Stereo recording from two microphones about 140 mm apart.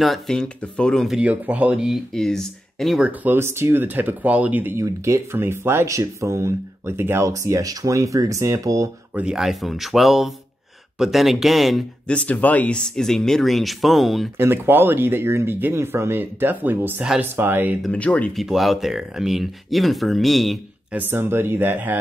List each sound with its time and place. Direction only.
0.0 s speech: centre (ahead or behind)
3.1 s speech: 15° right (ahead or behind)
9.1 s speech: 5° right (ahead or behind)
14.3 s speech: 15° right (ahead or behind)
17.8 s speech: 10° left (ahead or behind)
20.9 s speech: 15° right (ahead or behind)